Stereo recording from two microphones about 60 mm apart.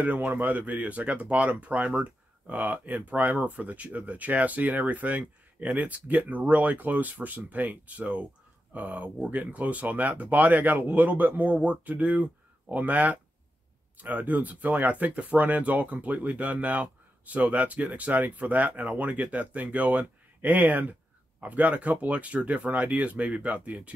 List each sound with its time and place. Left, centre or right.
0.0 s speech: right